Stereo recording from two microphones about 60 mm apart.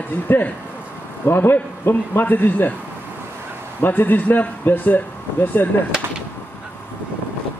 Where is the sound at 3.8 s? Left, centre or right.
Left.